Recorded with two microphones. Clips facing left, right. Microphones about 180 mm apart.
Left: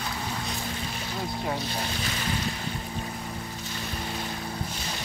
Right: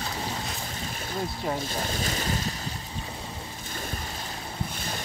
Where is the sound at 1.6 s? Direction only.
45° right (ahead or behind).